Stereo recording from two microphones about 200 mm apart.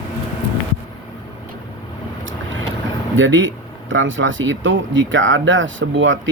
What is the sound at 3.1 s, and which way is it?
Speech, 70° right (ahead or behind).